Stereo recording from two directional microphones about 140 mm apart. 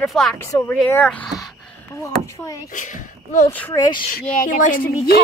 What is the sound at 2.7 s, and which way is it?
Speech, 65° left (ahead or behind).